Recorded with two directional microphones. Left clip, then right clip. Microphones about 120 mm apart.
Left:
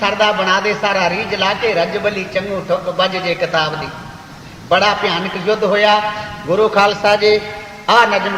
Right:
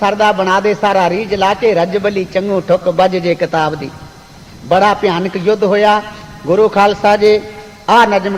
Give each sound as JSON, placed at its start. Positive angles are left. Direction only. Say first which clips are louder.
{"t": 0.0, "sound": "a man's voice", "louder": "right 3 dB", "side_deg": 30}
{"t": 4.7, "sound": "a man's voice", "louder": "right 3 dB", "side_deg": 25}